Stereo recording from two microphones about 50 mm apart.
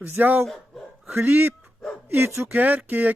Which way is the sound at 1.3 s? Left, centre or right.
Right.